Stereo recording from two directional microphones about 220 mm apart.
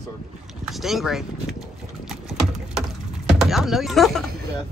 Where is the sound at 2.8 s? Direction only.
Centre (ahead or behind).